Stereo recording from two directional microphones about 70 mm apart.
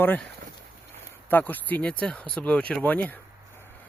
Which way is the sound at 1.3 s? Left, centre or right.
Left.